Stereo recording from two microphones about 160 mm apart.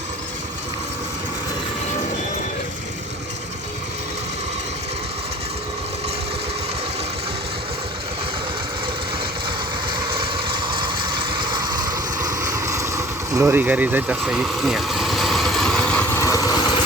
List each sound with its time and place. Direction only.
9.9 s vehicle: 30° right (ahead or behind); by 16.8 s 25° left (ahead or behind)